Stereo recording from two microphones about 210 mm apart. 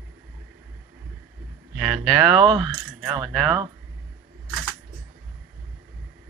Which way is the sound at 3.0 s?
5° right (ahead or behind).